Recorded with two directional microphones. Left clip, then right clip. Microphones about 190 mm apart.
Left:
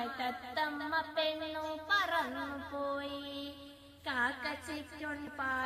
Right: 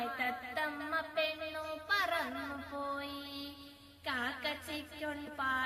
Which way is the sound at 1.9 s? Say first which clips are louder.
Left 1 dB; 45° right (ahead or behind).